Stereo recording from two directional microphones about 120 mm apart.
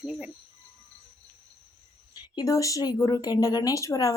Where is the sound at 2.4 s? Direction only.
30° left (ahead or behind).